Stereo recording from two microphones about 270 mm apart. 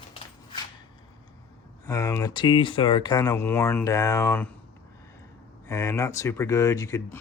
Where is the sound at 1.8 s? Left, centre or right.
Centre.